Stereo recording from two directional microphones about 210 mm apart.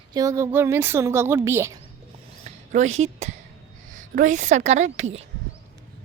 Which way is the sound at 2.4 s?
30° right (ahead or behind).